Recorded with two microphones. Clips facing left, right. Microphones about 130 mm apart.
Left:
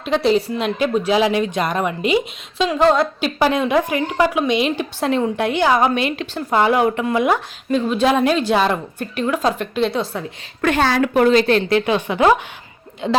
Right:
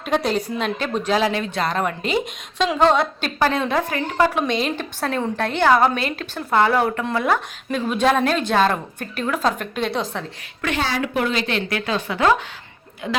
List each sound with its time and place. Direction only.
0.0 s a woman's voice: centre (ahead or behind)
7.7 s a woman's voice: centre (ahead or behind)
10.6 s a woman's voice: 50° left (ahead or behind)
11.7 s speech: 20° left (ahead or behind)